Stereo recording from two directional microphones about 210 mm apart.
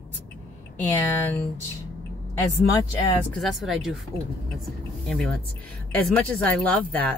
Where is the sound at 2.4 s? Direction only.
15° left (ahead or behind).